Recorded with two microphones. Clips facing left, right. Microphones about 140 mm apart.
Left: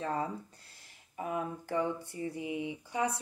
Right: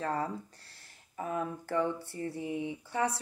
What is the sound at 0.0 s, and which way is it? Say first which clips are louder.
Speech: right 1 dB; 20° left (ahead or behind).